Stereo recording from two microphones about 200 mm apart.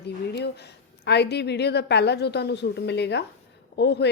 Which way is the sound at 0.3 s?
55° left (ahead or behind).